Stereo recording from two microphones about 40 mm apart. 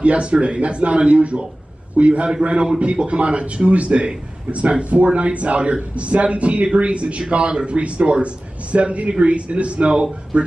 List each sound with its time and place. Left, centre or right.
0.0 s a man's voice: right